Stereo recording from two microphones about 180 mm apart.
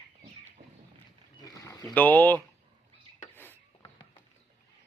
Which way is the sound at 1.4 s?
20° left (ahead or behind).